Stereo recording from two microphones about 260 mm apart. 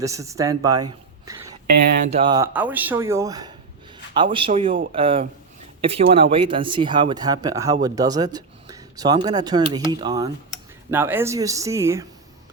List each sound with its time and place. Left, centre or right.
0.0 s speech: centre
2.0 s a man's voice: right
4.7 s speech: right
4.9 s a man's voice: right